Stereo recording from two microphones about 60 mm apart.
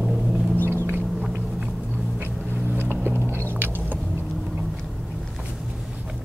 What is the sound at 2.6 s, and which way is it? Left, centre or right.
Vehicle, right.